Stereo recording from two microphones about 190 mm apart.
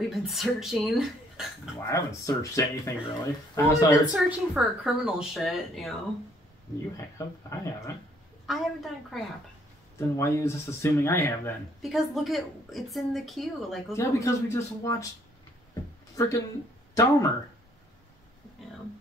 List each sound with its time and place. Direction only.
0.1 s a woman's voice: centre (ahead or behind)
1.8 s speech: 15° left (ahead or behind)
4.1 s a woman's voice: 5° right (ahead or behind)
7.2 s speech: 15° left (ahead or behind)
8.5 s a woman's voice: centre (ahead or behind)
9.9 s speech: 15° left (ahead or behind)
11.8 s a woman's voice: centre (ahead or behind)
13.9 s speech: 15° left (ahead or behind)
16.2 s speech: 15° left (ahead or behind)